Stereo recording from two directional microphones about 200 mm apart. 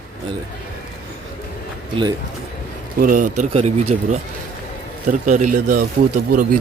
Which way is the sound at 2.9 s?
45° right (ahead or behind).